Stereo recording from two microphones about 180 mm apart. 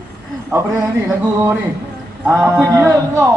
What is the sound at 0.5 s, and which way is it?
A man's voice, 15° right (ahead or behind).